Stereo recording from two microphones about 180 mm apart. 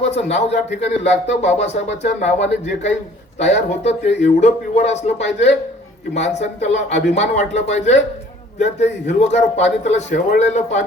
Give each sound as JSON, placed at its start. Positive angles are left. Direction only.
{"t": 0.3, "sound": "speech", "side_deg": 35}